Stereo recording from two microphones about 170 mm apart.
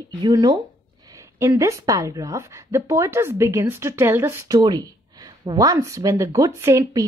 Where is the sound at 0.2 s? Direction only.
25° right (ahead or behind).